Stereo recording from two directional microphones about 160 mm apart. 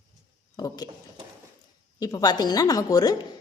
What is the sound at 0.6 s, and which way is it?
Speech, 25° left (ahead or behind).